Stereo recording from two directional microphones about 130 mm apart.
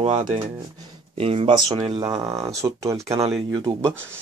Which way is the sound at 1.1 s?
50° right (ahead or behind).